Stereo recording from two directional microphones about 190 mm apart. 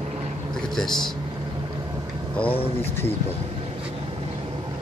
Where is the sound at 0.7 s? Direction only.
Centre (ahead or behind).